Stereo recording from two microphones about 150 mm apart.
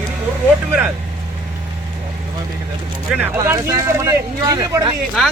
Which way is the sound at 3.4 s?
20° right (ahead or behind).